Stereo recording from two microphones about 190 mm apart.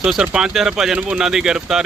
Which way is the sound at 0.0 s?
Centre (ahead or behind).